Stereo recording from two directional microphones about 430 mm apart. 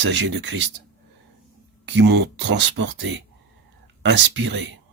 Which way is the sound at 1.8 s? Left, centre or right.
Right.